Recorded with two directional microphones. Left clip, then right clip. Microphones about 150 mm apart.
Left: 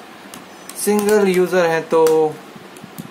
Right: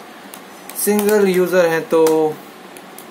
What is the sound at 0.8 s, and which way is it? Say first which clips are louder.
Speech: even; 15° left (ahead or behind).